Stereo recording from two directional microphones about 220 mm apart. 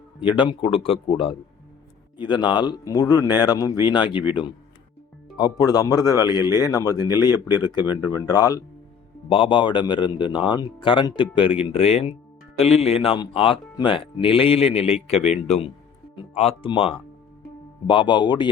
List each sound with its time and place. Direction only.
0.2 s speech: 20° left (ahead or behind)
5.5 s speech: 15° left (ahead or behind)